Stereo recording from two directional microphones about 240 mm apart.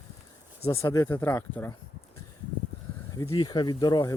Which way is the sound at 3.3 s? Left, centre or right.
Centre.